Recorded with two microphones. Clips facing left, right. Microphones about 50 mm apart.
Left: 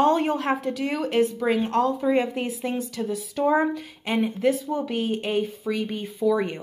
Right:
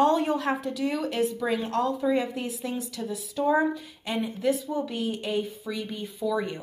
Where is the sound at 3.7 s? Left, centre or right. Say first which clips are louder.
Left 5 dB; left.